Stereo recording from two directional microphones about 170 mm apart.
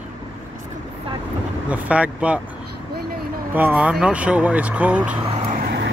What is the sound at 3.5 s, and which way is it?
Speech, 10° right (ahead or behind).